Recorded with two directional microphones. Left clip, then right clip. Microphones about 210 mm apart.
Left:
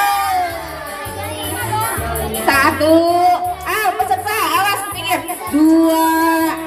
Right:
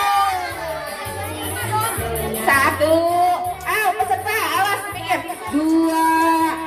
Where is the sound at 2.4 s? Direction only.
45° left (ahead or behind).